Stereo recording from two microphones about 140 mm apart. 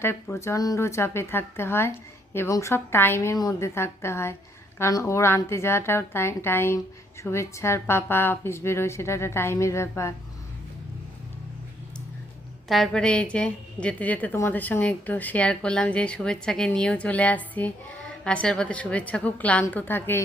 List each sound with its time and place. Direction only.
0.0 s a woman's voice: 15° left (ahead or behind)
12.6 s a woman's voice: centre (ahead or behind)